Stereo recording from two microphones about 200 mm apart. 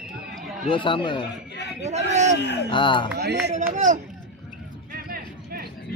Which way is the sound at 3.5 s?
35° right (ahead or behind).